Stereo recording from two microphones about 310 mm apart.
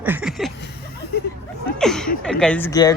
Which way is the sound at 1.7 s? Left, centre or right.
Centre.